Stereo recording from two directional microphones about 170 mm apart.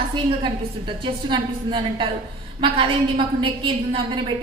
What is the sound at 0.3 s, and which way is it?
A woman's voice, 30° right (ahead or behind).